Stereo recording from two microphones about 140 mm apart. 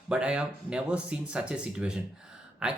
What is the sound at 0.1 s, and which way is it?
Speech, 5° right (ahead or behind).